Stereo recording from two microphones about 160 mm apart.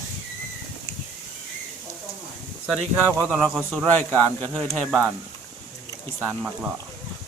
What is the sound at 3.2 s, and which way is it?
Speech, centre (ahead or behind).